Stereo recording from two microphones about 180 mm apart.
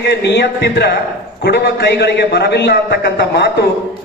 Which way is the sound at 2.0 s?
60° left (ahead or behind).